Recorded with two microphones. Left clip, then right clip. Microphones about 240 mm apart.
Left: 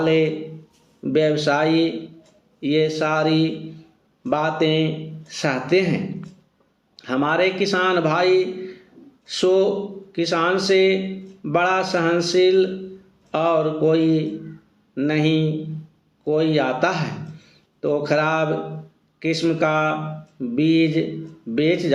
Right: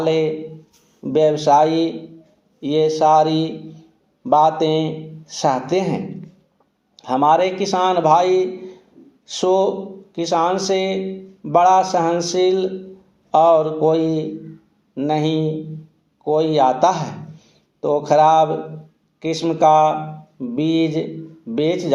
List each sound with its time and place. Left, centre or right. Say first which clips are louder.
0.0 s a man's voice: even; centre
1.3 s a man's voice: right 5 dB; centre
10.1 s a sound: even; centre
10.4 s a man's voice: left 1 dB; centre